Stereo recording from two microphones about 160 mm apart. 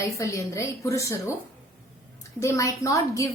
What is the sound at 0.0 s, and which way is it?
A woman's voice, 20° left (ahead or behind).